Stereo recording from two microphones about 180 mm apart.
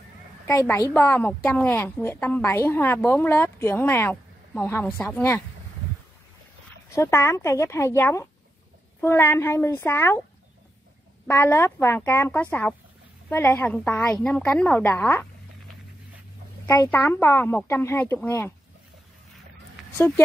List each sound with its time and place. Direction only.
0.7 s a woman's voice: 15° left (ahead or behind)
6.9 s a woman's voice: 15° left (ahead or behind)
11.2 s a woman's voice: 10° left (ahead or behind)
16.6 s a woman's voice: 15° left (ahead or behind)